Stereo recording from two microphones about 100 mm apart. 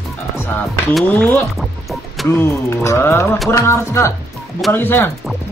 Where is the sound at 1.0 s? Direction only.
15° left (ahead or behind).